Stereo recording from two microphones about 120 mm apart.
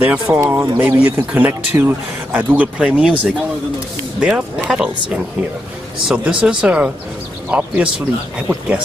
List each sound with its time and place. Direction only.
0.0 s speech: 15° right (ahead or behind)
4.2 s speech: 5° right (ahead or behind)